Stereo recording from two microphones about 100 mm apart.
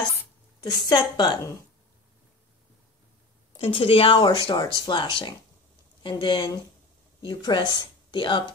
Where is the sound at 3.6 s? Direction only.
65° left (ahead or behind).